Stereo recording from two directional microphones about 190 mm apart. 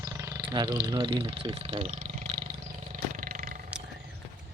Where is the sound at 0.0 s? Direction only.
15° right (ahead or behind).